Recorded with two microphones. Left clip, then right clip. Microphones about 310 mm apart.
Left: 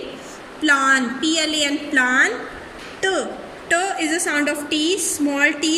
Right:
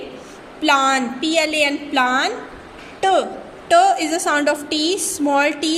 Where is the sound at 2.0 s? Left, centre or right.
Right.